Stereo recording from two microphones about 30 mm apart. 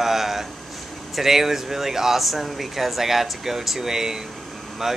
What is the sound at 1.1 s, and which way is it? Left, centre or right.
Speech, centre.